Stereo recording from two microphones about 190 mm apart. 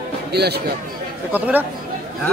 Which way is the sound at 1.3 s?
10° right (ahead or behind).